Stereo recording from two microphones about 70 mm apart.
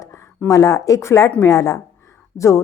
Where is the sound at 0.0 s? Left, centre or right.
Left.